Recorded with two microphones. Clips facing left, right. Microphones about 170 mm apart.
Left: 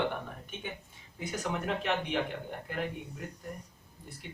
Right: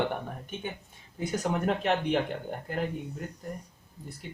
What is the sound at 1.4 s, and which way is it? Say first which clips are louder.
Speech: right 5 dB; 45° right (ahead or behind).